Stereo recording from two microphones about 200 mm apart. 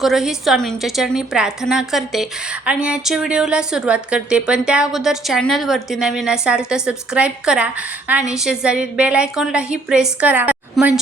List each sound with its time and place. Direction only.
0.0 s a woman's voice: centre (ahead or behind)